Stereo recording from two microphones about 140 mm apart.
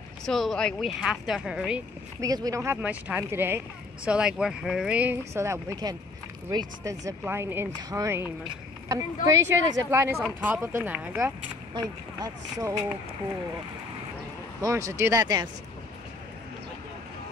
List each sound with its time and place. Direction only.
0.3 s a woman's voice: centre (ahead or behind)
2.1 s speech: 25° right (ahead or behind)
11.7 s speech: 25° right (ahead or behind)
14.6 s speech: 20° right (ahead or behind)